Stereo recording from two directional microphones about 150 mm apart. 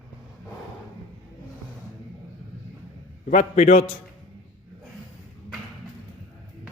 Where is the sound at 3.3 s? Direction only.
55° left (ahead or behind).